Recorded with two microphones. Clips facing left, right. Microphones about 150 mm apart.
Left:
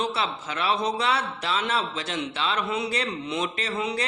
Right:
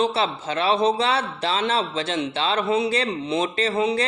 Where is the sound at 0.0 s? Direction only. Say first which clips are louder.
Right 6 dB; 30° right (ahead or behind).